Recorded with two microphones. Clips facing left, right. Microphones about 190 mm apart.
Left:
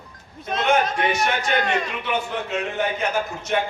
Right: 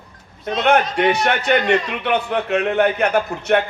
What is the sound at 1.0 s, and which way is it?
A man's voice, 65° right (ahead or behind).